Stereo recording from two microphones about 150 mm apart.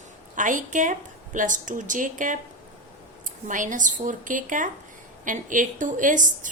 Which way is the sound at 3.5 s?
60° right (ahead or behind).